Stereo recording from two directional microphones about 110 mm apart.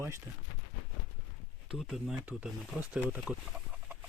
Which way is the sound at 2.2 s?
10° right (ahead or behind).